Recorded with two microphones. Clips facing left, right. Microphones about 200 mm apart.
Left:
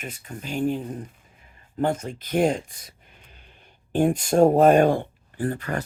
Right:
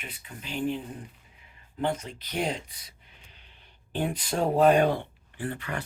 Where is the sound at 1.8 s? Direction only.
45° left (ahead or behind).